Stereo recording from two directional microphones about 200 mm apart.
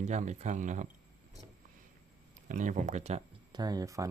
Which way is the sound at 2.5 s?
40° right (ahead or behind).